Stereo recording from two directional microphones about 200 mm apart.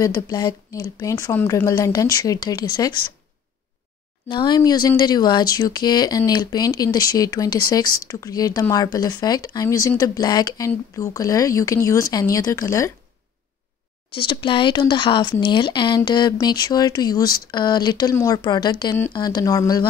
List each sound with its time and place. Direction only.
0.0 s speech: 20° left (ahead or behind)
4.3 s speech: 20° left (ahead or behind)
14.1 s speech: 25° left (ahead or behind)